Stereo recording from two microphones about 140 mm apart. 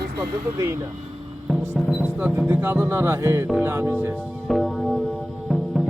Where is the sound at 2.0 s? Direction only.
10° right (ahead or behind).